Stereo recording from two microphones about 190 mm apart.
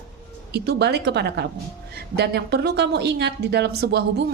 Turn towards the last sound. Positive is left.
turn(degrees=-60)  # may be behind; listen again after turning